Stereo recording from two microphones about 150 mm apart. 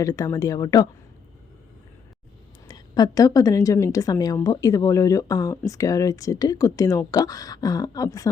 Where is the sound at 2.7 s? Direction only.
25° left (ahead or behind).